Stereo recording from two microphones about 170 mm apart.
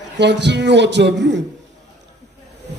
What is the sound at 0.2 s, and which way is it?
A man's voice, 90° right.